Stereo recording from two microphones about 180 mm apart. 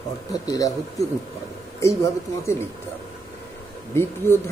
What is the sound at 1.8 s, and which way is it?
Speech, 15° left (ahead or behind).